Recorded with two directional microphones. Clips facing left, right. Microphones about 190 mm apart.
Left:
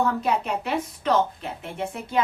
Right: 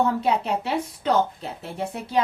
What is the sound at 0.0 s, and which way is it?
A woman's voice, 30° right (ahead or behind).